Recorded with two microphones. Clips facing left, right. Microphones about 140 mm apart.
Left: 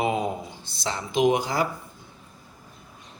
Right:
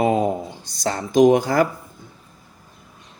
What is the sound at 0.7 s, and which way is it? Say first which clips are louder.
Speech: right 7 dB; 45° right (ahead or behind).